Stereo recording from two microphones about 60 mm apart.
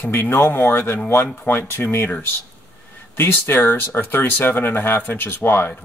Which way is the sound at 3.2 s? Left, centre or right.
Left.